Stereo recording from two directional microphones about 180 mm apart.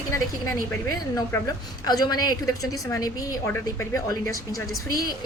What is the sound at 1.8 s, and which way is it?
A woman's voice, 20° left (ahead or behind).